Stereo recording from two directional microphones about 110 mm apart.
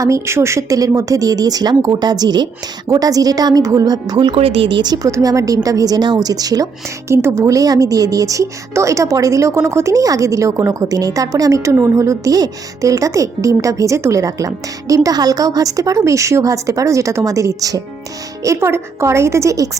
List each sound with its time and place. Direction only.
0.0 s a woman's voice: 25° right (ahead or behind)
4.4 s speech: 60° right (ahead or behind)
4.8 s a woman's voice: 35° right (ahead or behind)